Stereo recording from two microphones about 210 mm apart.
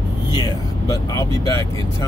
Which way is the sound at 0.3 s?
20° left (ahead or behind).